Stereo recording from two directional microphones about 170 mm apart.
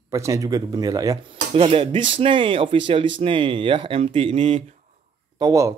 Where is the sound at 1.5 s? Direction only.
35° right (ahead or behind).